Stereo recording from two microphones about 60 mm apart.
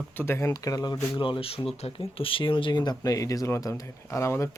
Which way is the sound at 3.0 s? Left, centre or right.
Left.